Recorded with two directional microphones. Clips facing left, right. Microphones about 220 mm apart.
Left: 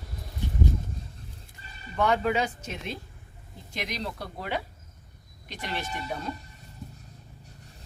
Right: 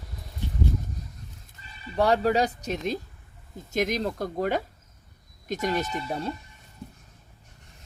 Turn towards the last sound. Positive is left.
turn(degrees=-35)  # may be behind; listen again after turning